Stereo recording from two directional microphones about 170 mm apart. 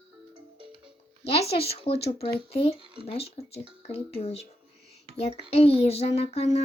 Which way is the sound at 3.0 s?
35° left (ahead or behind).